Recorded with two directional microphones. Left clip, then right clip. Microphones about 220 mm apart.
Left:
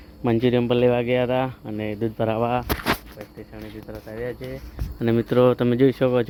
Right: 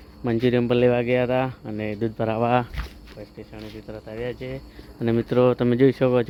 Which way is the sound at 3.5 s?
5° right (ahead or behind).